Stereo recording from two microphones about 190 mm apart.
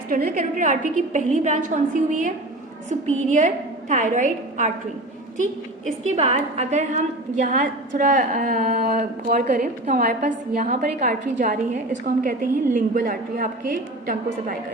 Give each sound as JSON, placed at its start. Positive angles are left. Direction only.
{"t": 0.1, "sound": "a woman's voice", "side_deg": -45}
{"t": 6.1, "sound": "a woman's voice", "side_deg": -35}